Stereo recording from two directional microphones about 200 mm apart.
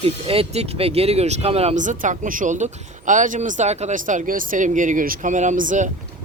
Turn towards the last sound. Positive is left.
turn(degrees=-40)  # may be behind; listen again after turning